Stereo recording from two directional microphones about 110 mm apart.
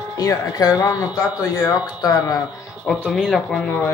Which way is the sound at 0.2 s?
30° left (ahead or behind).